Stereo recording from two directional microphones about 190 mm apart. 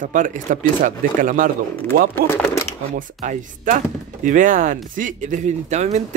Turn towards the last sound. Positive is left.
turn(degrees=-35)  # may be behind; listen again after turning